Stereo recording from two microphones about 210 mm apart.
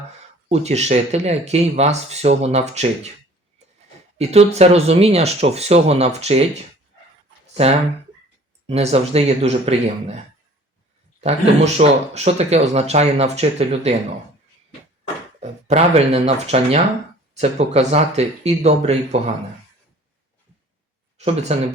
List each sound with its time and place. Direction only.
0.4 s speech: 30° right (ahead or behind)
4.2 s speech: 30° right (ahead or behind)
7.4 s a sound: 30° right (ahead or behind)
8.6 s speech: 30° right (ahead or behind)
11.2 s speech: 30° right (ahead or behind)
15.4 s speech: 30° right (ahead or behind)
21.2 s speech: 30° right (ahead or behind)